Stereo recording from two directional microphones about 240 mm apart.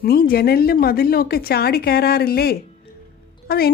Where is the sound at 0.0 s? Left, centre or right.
Left.